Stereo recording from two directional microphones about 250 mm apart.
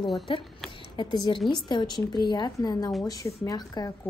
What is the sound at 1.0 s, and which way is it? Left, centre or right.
A woman's voice, centre.